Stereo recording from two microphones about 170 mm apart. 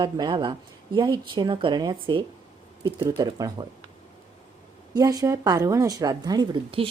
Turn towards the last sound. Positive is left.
turn(degrees=-25)  # may be behind; listen again after turning